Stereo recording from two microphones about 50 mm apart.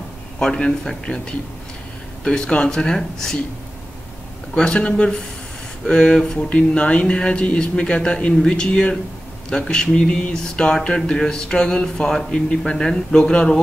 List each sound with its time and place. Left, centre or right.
0.4 s speech: centre
4.6 s a man's voice: left